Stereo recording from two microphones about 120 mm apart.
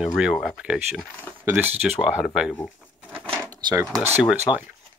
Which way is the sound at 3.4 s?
30° right (ahead or behind).